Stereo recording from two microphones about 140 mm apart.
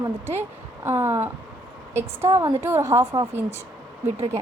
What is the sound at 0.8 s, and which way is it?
A woman's voice, 15° right (ahead or behind).